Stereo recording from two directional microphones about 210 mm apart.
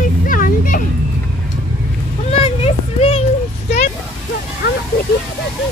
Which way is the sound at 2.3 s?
25° left (ahead or behind).